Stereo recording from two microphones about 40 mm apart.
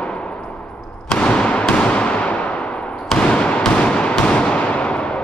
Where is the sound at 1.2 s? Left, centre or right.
Left.